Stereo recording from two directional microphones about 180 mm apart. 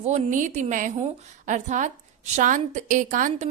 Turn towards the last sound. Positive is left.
turn(degrees=-45)  # may be behind; listen again after turning